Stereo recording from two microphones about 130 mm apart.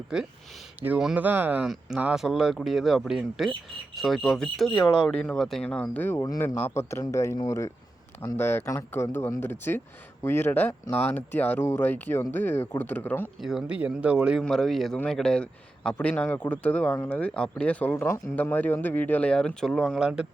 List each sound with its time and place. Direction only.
0.8 s a man's voice: 15° right (ahead or behind); by 13.3 s 15° left (ahead or behind)
13.4 s a man's voice: 5° right (ahead or behind)